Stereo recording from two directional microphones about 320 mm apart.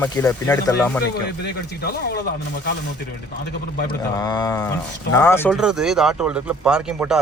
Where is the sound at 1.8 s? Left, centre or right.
Left.